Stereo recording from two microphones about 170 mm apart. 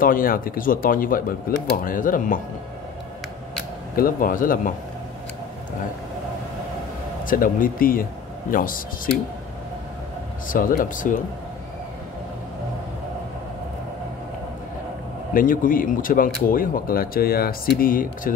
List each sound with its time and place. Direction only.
0.0 s speech: 55° left (ahead or behind)
3.9 s speech: 55° left (ahead or behind)
7.2 s speech: 55° left (ahead or behind)
10.5 s speech: 55° left (ahead or behind)
15.3 s speech: 55° left (ahead or behind)